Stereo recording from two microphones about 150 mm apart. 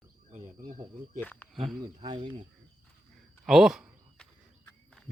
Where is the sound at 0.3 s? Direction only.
50° right (ahead or behind).